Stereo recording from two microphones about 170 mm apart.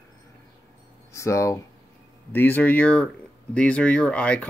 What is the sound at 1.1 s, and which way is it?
Speech, 15° left (ahead or behind).